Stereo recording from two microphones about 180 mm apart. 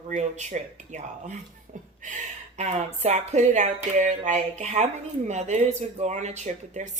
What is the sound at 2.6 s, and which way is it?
Speech, 40° right (ahead or behind).